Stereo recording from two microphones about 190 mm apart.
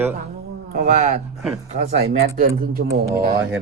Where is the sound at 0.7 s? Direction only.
40° right (ahead or behind).